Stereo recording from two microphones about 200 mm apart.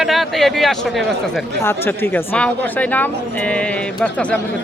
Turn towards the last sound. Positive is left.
turn(degrees=5)  # may be behind; listen again after turning